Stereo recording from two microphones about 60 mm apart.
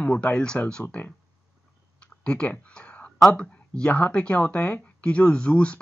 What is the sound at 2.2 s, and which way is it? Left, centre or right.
Speech, centre.